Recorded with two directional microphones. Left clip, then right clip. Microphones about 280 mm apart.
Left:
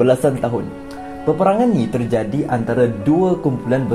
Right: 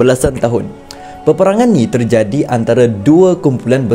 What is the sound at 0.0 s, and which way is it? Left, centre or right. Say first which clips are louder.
Speech: right 4 dB; right.